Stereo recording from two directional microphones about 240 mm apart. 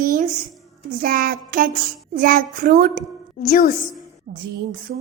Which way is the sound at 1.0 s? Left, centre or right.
Right.